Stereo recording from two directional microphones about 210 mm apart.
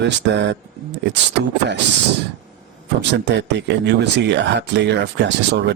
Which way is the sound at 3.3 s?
55° right (ahead or behind).